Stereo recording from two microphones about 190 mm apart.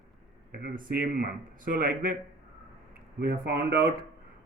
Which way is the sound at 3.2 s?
55° right (ahead or behind).